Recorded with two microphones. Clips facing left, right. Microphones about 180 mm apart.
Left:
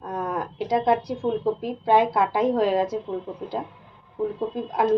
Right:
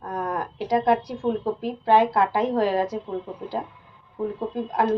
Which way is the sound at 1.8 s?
10° left (ahead or behind).